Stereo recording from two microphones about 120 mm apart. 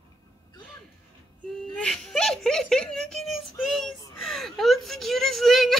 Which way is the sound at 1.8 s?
5° left (ahead or behind).